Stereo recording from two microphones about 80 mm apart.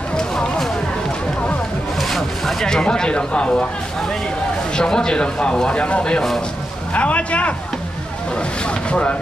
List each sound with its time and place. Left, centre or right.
0.1 s a sound: centre
2.0 s zipper: centre
4.7 s speech: centre